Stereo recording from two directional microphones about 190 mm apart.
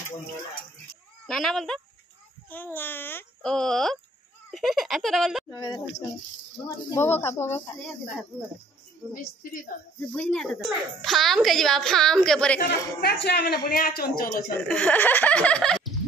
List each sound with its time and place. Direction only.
1.2 s a child's voice: centre (ahead or behind)
5.5 s speech: 20° left (ahead or behind)
6.9 s a child's voice: 10° left (ahead or behind)
9.1 s a man's voice: 45° left (ahead or behind)
10.1 s speech: 5° left (ahead or behind)
12.5 s a man's voice: 55° left (ahead or behind)
14.7 s a child's voice: 10° left (ahead or behind)